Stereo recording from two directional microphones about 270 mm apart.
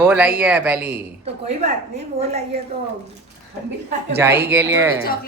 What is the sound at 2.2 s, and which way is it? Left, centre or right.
Speech, right.